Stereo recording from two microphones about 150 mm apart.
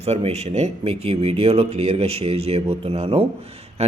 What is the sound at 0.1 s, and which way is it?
A man's voice, 45° right (ahead or behind).